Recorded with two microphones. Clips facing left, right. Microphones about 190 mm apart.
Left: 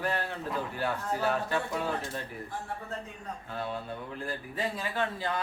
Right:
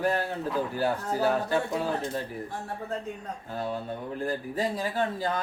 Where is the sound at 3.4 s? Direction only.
40° right (ahead or behind).